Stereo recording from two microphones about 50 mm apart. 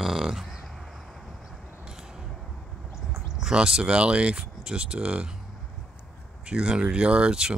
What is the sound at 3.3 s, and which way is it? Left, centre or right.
Speech, centre.